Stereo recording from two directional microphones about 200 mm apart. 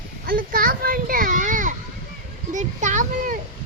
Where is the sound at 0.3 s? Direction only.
45° right (ahead or behind).